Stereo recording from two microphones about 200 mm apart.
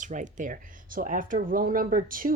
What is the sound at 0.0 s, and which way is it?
Speech, 40° right (ahead or behind).